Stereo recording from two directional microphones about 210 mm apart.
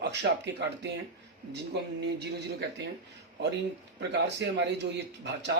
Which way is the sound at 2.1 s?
55° right (ahead or behind).